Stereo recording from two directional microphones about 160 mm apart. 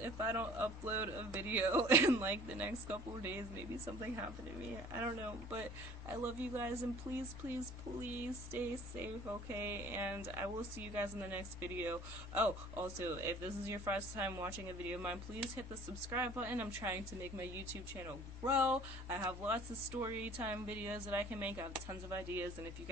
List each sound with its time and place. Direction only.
0.0 s speech: 15° right (ahead or behind)
4.9 s speech: 15° right (ahead or behind)
8.5 s speech: 15° right (ahead or behind)
18.5 s speech: 10° right (ahead or behind)